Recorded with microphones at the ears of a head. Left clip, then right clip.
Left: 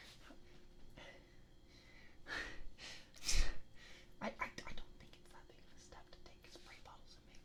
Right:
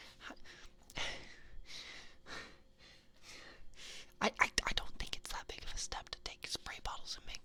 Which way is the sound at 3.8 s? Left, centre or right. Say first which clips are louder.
Right 16 dB; right.